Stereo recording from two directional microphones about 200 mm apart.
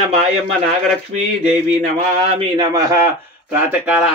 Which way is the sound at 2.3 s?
20° right (ahead or behind).